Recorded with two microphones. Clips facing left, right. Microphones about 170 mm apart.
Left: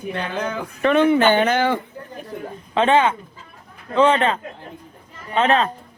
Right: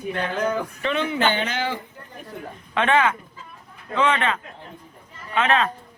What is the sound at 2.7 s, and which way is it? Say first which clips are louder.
Speech: left 4 dB; 30° left (ahead or behind).